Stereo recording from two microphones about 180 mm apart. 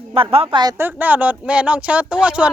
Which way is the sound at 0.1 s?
30° right (ahead or behind).